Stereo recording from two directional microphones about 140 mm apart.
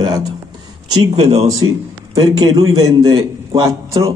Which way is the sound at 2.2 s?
25° right (ahead or behind).